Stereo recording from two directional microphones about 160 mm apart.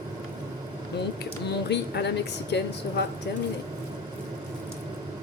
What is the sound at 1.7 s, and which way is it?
Speech, 90° left.